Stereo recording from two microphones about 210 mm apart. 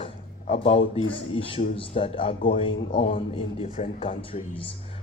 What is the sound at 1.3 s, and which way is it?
Speech, 25° left (ahead or behind).